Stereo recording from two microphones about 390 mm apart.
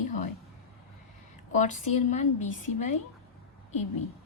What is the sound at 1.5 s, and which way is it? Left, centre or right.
Speech, centre.